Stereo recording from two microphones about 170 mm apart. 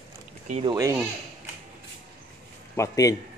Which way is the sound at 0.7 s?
20° right (ahead or behind).